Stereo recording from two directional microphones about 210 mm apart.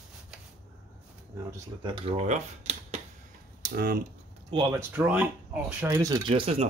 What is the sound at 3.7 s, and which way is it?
Speech, 45° right (ahead or behind).